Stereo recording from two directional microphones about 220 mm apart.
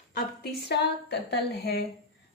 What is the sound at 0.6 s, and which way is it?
Speech, 50° left (ahead or behind).